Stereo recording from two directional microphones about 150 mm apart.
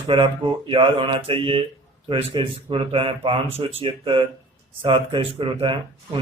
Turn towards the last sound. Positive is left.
turn(degrees=-35)  # may be behind; listen again after turning